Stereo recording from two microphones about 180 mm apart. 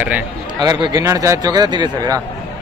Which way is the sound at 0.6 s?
20° right (ahead or behind).